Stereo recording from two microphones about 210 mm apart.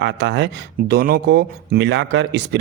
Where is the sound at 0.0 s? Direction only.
55° right (ahead or behind).